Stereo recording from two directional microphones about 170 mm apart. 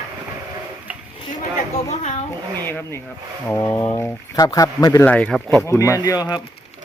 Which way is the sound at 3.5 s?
15° left (ahead or behind).